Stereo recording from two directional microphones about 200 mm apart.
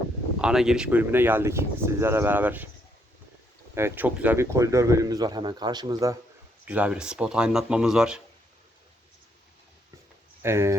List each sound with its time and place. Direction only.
0.4 s speech: 5° right (ahead or behind)
3.8 s speech: 10° right (ahead or behind)
6.7 s speech: 5° right (ahead or behind)
10.4 s speech: 15° right (ahead or behind)